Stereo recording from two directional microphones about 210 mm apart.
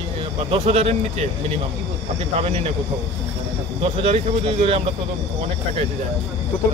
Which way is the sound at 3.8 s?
25° right (ahead or behind).